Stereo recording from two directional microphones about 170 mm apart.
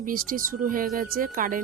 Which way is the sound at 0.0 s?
55° right (ahead or behind).